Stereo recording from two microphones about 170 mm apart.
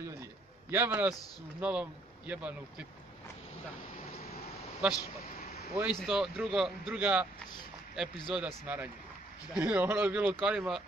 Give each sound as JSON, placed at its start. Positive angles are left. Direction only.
{"t": 0.7, "sound": "speech", "side_deg": -15}
{"t": 4.8, "sound": "speech", "side_deg": -5}